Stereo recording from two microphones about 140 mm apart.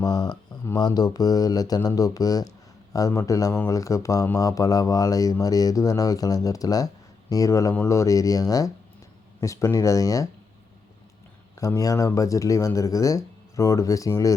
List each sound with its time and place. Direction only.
0.0 s speech: 30° left (ahead or behind)
11.6 s speech: 25° left (ahead or behind)